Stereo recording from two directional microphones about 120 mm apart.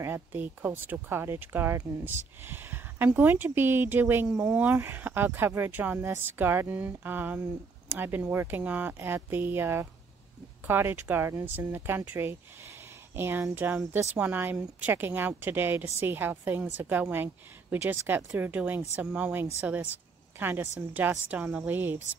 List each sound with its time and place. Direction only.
0.0 s speech: 15° right (ahead or behind)